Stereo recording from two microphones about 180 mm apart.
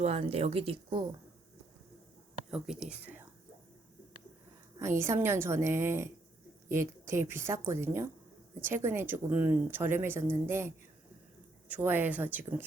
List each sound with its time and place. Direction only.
0.0 s a woman's voice: 35° right (ahead or behind)
2.5 s speech: 5° right (ahead or behind)
4.8 s speech: 15° right (ahead or behind)
11.7 s speech: 10° right (ahead or behind)